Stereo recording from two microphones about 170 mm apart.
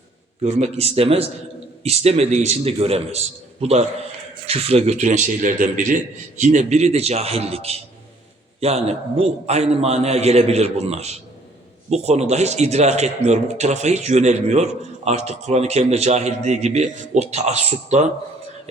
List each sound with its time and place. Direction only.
0.4 s speech: 40° right (ahead or behind)